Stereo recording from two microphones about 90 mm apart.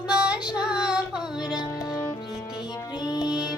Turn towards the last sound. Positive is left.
turn(degrees=45)  # may be behind; listen again after turning